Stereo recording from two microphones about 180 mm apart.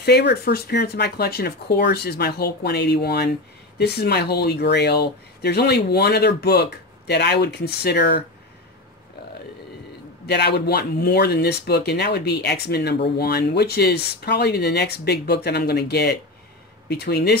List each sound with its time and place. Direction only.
0.0 s speech: 65° left (ahead or behind)
10.2 s speech: 70° left (ahead or behind)